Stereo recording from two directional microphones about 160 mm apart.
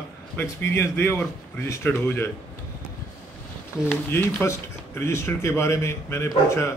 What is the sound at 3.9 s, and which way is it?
Speech, 15° left (ahead or behind).